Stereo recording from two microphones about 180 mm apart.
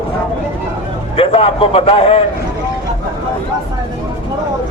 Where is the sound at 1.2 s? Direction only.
30° left (ahead or behind).